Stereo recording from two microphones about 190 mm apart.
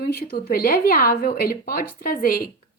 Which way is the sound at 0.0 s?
55° left (ahead or behind).